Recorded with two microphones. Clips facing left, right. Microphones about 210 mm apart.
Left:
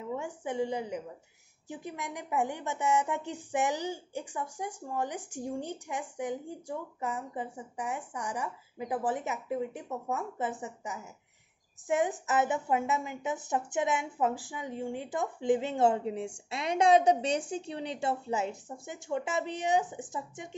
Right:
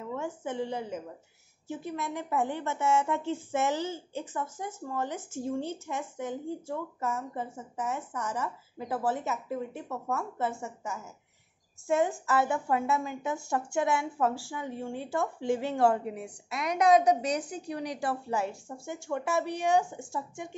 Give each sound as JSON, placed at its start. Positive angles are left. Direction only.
{"t": 0.0, "sound": "a woman's voice", "side_deg": 15}